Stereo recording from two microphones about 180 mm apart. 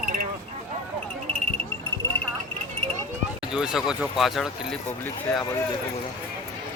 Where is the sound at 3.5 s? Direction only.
5° right (ahead or behind).